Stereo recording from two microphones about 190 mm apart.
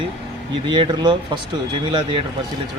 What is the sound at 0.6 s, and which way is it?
A man's voice, 25° right (ahead or behind).